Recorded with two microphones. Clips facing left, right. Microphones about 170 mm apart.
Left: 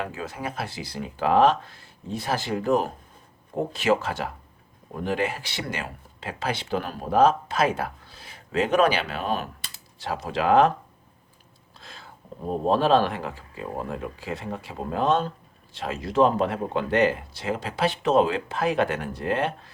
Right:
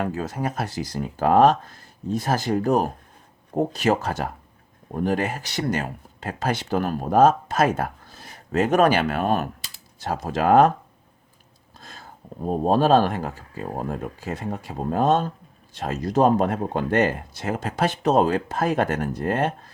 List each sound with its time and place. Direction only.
0.0 s speech: 40° right (ahead or behind)
11.8 s a sound: 45° right (ahead or behind)
12.6 s speech: 45° right (ahead or behind)